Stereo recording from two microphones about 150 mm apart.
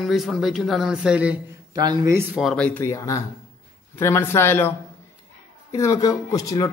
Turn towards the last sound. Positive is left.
turn(degrees=20)  # may be behind; listen again after turning